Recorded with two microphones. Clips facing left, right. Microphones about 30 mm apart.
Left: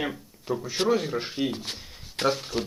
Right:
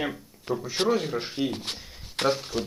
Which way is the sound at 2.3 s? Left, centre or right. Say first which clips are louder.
Even; centre.